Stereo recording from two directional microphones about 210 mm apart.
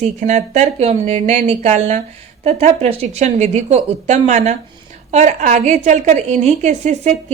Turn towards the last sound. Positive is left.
turn(degrees=-35)  # may be behind; listen again after turning